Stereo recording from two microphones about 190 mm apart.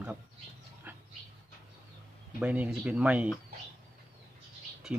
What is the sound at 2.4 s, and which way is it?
Speech, 5° right (ahead or behind).